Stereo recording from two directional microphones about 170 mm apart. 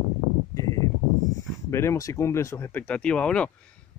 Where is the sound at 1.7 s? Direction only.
15° left (ahead or behind).